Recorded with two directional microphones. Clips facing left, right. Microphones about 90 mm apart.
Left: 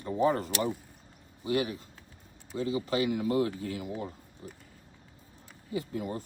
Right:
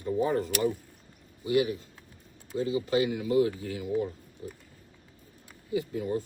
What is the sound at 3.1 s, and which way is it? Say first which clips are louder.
Speech: right 3 dB; 45° left (ahead or behind).